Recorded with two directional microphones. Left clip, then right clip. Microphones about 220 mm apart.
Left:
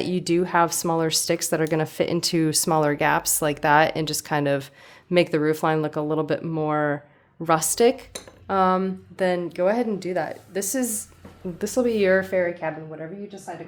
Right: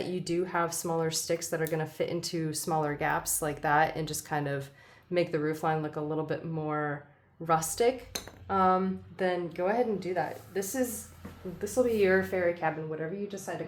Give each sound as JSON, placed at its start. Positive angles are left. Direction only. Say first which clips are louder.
{"t": 0.0, "sound": "a woman's voice", "louder": "left 8 dB", "side_deg": 50}